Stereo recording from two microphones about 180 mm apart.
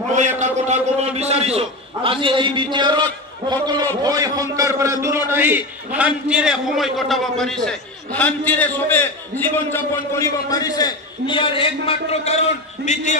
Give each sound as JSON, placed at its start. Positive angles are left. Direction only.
{"t": 0.4, "sound": "a man's voice", "side_deg": -40}